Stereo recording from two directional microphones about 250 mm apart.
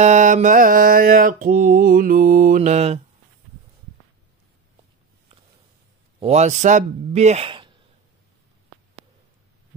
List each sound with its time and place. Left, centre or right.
0.0 s mantra: right
6.1 s a man's voice: right